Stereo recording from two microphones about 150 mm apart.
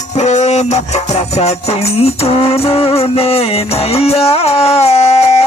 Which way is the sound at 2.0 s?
40° left (ahead or behind).